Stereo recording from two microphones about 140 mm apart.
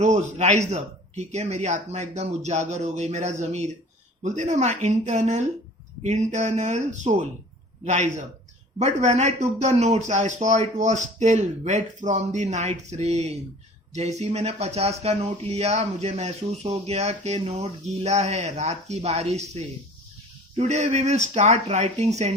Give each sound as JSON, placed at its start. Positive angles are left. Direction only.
{"t": 0.0, "sound": "speech", "side_deg": -55}